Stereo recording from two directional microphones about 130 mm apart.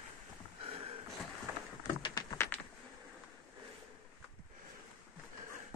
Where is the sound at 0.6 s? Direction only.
45° right (ahead or behind).